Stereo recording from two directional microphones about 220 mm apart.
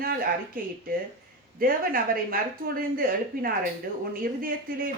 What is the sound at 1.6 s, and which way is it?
Speech, 40° right (ahead or behind).